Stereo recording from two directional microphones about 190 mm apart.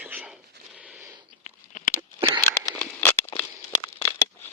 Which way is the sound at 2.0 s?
15° right (ahead or behind).